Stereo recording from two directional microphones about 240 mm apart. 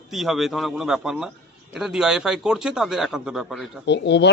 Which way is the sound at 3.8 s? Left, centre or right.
Left.